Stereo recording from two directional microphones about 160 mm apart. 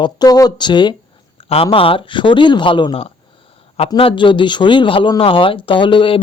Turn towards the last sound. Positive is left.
turn(degrees=30)  # may be behind; listen again after turning